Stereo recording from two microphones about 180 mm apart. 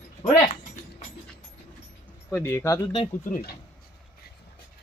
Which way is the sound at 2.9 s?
25° left (ahead or behind).